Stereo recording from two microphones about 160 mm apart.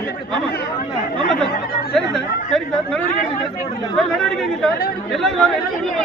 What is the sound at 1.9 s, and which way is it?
Chatter, centre (ahead or behind).